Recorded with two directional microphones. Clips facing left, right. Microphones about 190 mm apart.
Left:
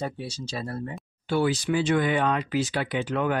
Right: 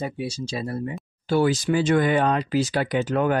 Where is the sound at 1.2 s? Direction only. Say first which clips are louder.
Right 4 dB; 40° right (ahead or behind).